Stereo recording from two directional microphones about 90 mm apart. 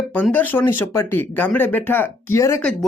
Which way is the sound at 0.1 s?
20° left (ahead or behind).